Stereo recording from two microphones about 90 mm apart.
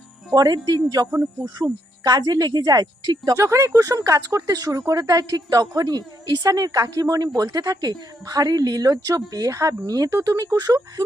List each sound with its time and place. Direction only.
0.3 s a woman's voice: 45° right (ahead or behind)
1.1 s speech: 20° right (ahead or behind)
1.5 s a woman's voice: 45° right (ahead or behind)
3.3 s a woman's voice: 35° right (ahead or behind)